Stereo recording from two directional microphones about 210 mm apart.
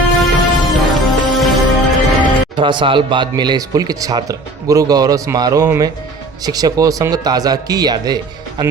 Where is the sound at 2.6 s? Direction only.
20° right (ahead or behind).